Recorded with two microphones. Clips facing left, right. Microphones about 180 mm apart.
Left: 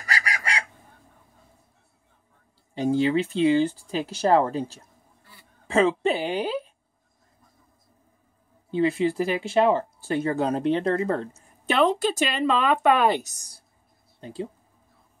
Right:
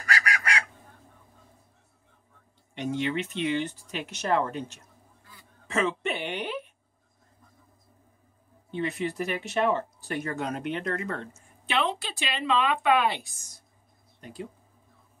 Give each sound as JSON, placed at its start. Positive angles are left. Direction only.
{"t": 2.7, "sound": "speech", "side_deg": 35}
{"t": 8.6, "sound": "speech", "side_deg": 30}
{"t": 14.2, "sound": "speech", "side_deg": 30}